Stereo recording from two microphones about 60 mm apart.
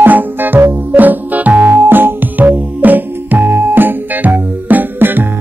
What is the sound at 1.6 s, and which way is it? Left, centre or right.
Music, right.